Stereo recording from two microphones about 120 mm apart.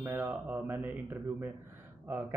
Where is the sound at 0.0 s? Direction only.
15° right (ahead or behind).